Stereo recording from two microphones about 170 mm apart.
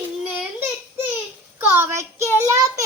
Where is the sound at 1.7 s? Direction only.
15° right (ahead or behind).